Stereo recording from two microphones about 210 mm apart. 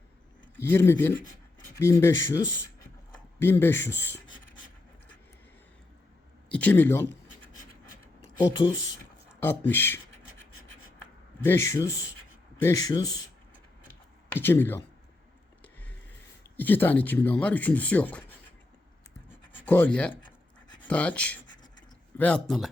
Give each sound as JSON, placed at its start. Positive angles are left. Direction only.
{"t": 0.7, "sound": "speech", "side_deg": 10}
{"t": 3.4, "sound": "speech", "side_deg": 10}
{"t": 6.5, "sound": "speech", "side_deg": 5}
{"t": 8.4, "sound": "speech", "side_deg": 20}
{"t": 9.5, "sound": "speech", "side_deg": 10}
{"t": 11.0, "sound": "a sound", "side_deg": 10}
{"t": 12.5, "sound": "speech", "side_deg": 15}
{"t": 14.3, "sound": "speech", "side_deg": 10}
{"t": 15.6, "sound": "music", "side_deg": 5}
{"t": 16.6, "sound": "speech", "side_deg": 10}
{"t": 19.3, "sound": "scratch", "side_deg": 10}
{"t": 20.8, "sound": "speech", "side_deg": 5}